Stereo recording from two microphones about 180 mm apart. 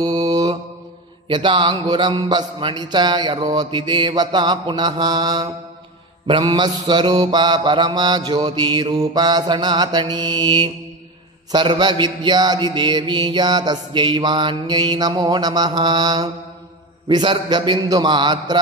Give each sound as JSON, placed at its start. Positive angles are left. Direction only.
{"t": 0.0, "sound": "mantra", "side_deg": -20}